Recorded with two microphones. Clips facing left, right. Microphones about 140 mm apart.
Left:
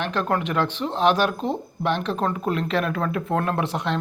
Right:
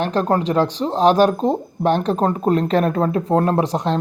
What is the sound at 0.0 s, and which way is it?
Speech, 35° right (ahead or behind).